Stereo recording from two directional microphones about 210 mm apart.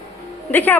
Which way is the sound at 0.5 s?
10° left (ahead or behind).